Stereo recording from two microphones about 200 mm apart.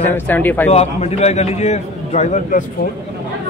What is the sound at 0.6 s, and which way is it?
A man's voice, 30° left (ahead or behind).